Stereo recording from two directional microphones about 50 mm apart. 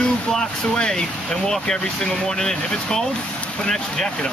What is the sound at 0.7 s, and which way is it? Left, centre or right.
Speech, centre.